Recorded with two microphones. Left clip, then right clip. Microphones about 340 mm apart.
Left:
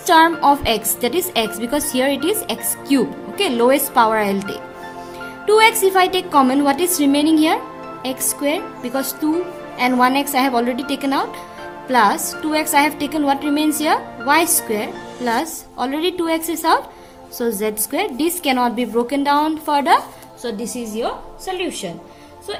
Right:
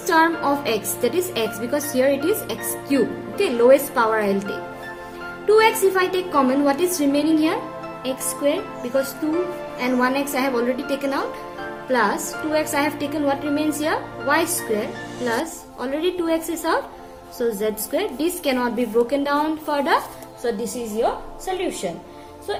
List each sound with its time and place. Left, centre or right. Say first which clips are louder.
0.0 s a woman's voice: left 6 dB; left
5.5 s a woman's voice: left 3 dB; left
9.7 s a woman's voice: left 6 dB; left
21.0 s a woman's voice: right 2 dB; left